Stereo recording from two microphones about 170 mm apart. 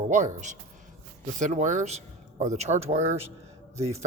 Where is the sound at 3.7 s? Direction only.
40° right (ahead or behind).